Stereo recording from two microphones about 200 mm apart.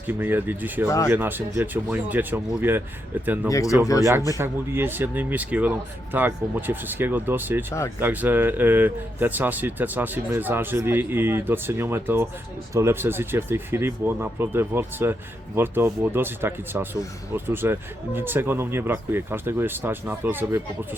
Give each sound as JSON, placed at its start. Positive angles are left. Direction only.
{"t": 0.1, "sound": "speech", "side_deg": -10}
{"t": 0.9, "sound": "speech", "side_deg": 15}
{"t": 1.1, "sound": "speech", "side_deg": -10}
{"t": 3.5, "sound": "speech", "side_deg": 15}
{"t": 4.4, "sound": "speech", "side_deg": -10}